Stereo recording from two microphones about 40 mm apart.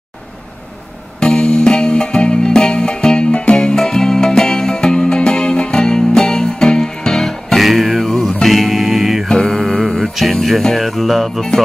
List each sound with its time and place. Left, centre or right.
1.2 s music: left
7.5 s music: centre
8.5 s music: centre
9.3 s mantra: centre
10.8 s music: centre